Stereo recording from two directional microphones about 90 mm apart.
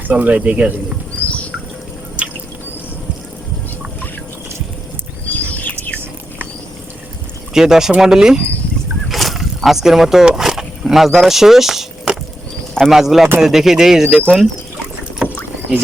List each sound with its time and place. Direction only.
0.1 s speech: 15° right (ahead or behind)
1.1 s a sound: 15° left (ahead or behind)
5.3 s a sound: 20° left (ahead or behind)
7.5 s speech: 5° right (ahead or behind)
9.0 s vehicle: centre (ahead or behind)
12.7 s speech: centre (ahead or behind)
14.1 s speech: 10° left (ahead or behind)